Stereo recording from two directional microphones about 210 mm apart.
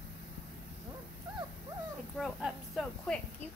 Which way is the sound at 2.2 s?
5° right (ahead or behind).